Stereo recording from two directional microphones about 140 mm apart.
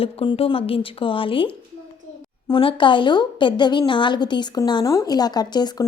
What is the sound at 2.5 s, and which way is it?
A woman's voice, 35° left (ahead or behind).